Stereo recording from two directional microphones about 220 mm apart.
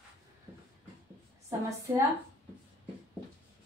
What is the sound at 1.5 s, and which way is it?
Speech, 15° right (ahead or behind).